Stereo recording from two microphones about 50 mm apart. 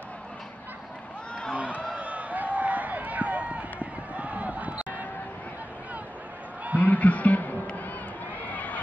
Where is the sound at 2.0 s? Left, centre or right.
Right.